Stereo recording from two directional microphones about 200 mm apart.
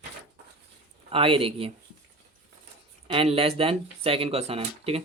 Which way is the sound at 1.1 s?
25° right (ahead or behind).